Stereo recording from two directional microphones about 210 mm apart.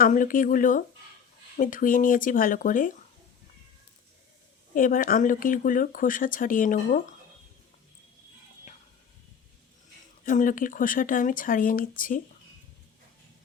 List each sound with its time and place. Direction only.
0.0 s speech: 40° left (ahead or behind)
4.7 s speech: 40° left (ahead or behind)
10.2 s speech: 40° left (ahead or behind)